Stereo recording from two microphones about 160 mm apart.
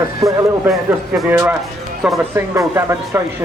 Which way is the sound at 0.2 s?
20° right (ahead or behind).